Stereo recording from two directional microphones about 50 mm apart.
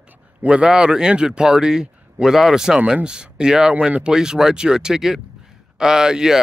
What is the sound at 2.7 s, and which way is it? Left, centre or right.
Speech, right.